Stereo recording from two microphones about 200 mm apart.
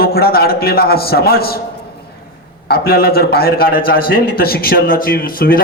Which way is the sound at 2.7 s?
50° left (ahead or behind).